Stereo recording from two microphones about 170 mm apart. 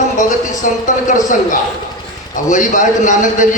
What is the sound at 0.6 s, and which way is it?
A man's voice, 50° left (ahead or behind).